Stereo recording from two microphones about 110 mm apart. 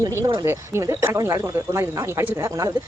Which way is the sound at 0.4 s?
25° right (ahead or behind).